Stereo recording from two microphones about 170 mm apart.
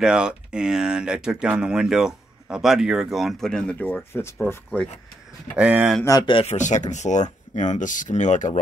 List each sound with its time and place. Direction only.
0.0 s speech: 5° right (ahead or behind)
5.6 s speech: 10° right (ahead or behind)
6.0 s speech: 25° left (ahead or behind)
6.5 s speech: 45° left (ahead or behind)